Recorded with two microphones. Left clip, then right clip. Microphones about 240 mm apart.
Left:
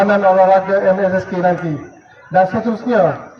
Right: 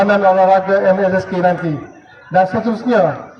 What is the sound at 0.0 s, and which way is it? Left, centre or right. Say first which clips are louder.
A man's voice: even; right.